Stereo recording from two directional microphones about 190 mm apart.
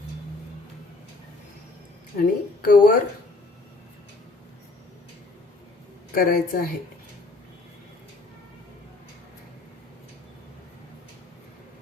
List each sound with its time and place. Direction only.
2.1 s speech: 50° left (ahead or behind)
6.1 s speech: 50° left (ahead or behind)